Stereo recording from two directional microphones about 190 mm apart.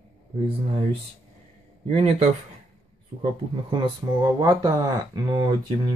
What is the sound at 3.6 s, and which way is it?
Speech, 25° right (ahead or behind).